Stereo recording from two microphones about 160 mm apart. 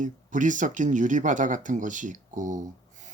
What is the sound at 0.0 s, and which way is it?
Speech, 55° right (ahead or behind).